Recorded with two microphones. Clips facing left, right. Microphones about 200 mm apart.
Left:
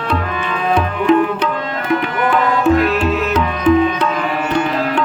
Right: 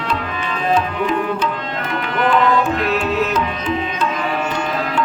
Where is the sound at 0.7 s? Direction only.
60° left (ahead or behind).